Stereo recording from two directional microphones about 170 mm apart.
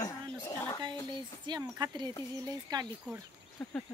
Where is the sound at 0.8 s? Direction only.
25° right (ahead or behind).